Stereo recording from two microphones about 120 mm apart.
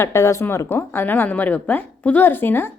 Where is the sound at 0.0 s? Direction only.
25° left (ahead or behind).